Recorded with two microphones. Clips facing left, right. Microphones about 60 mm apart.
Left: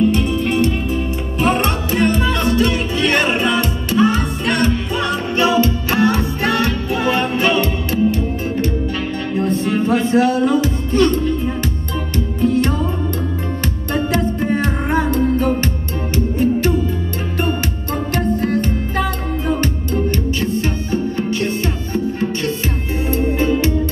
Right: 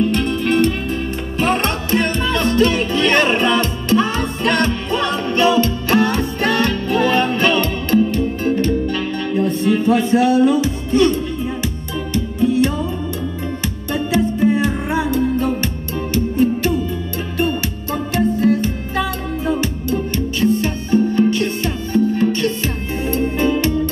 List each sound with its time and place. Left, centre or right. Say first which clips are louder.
0.1 s music: even; centre
5.3 s music: even; centre
9.4 s music: right 1 dB; left
13.9 s music: right 1 dB; left
20.1 s music: right 2 dB; left